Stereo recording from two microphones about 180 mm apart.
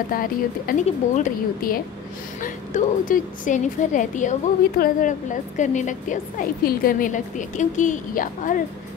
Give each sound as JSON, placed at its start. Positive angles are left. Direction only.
{"t": 0.1, "sound": "a woman's voice", "side_deg": 50}